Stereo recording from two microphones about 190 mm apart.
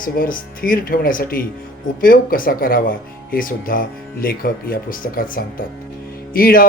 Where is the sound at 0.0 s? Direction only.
45° left (ahead or behind).